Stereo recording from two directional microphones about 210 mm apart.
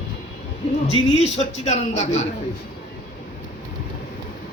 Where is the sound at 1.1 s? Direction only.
30° left (ahead or behind).